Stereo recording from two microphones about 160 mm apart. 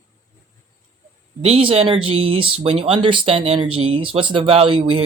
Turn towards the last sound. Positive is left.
turn(degrees=-35)  # may be behind; listen again after turning